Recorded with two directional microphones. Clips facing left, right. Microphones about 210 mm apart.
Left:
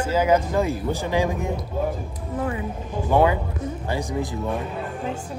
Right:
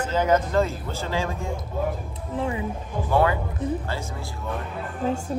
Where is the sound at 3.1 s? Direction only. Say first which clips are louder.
Left 3 dB; 15° left (ahead or behind).